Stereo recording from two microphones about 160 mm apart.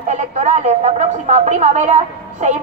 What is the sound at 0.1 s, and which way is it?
A woman's voice, 45° right (ahead or behind).